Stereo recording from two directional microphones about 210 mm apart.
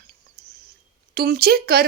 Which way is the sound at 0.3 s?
45° right (ahead or behind).